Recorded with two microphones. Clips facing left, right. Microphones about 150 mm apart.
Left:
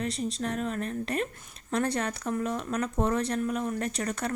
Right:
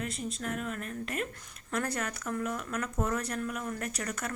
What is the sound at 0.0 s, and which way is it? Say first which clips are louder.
Speech: left 5 dB; 30° left (ahead or behind).